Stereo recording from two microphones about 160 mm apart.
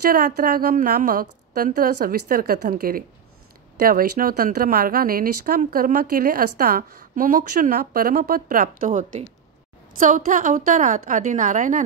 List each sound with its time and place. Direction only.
0.1 s speech: 65° right (ahead or behind)